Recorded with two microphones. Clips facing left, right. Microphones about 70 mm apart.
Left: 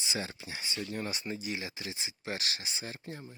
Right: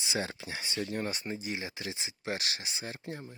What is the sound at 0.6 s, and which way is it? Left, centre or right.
Speech, right.